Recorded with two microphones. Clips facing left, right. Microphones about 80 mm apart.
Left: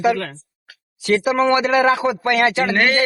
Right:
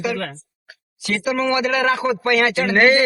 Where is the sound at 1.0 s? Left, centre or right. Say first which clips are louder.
Left 5 dB; left.